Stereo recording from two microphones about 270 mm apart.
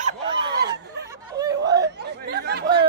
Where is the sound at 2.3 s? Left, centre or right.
Right.